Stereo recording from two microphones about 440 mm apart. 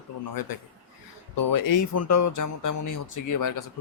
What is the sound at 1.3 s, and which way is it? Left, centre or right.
Speech, left.